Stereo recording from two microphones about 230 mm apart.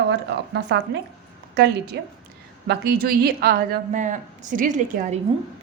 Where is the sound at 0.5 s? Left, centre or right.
Right.